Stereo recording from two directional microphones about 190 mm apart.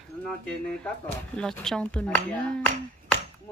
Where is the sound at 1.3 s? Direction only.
5° left (ahead or behind).